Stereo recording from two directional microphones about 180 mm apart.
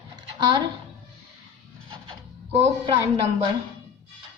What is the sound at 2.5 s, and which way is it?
Speech, 35° right (ahead or behind).